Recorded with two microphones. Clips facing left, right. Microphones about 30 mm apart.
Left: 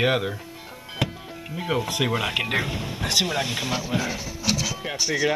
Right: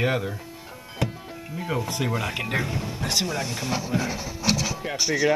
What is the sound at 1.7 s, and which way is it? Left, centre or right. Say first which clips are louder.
Speech: left 3 dB; left.